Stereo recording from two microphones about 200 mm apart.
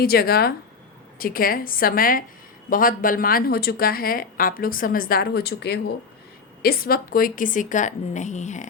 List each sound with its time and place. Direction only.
0.0 s a woman's voice: 50° left (ahead or behind)